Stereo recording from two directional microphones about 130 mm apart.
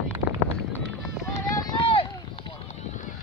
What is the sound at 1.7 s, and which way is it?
Run, 40° left (ahead or behind).